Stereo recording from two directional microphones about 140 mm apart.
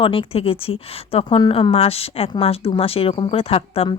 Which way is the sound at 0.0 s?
40° left (ahead or behind).